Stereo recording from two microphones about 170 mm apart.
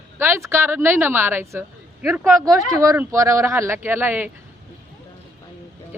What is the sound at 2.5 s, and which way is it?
Speech, 20° right (ahead or behind).